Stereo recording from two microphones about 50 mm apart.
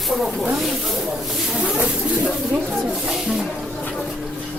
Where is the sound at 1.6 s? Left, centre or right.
Centre.